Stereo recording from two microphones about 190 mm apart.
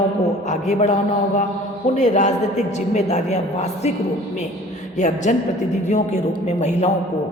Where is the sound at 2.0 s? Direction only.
40° left (ahead or behind).